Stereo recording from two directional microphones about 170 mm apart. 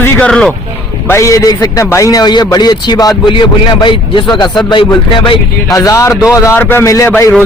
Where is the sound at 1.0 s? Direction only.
15° left (ahead or behind).